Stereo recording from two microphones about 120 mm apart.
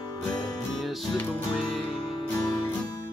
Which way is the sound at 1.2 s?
15° left (ahead or behind).